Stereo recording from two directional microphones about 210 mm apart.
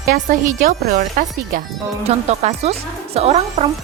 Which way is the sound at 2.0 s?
30° right (ahead or behind).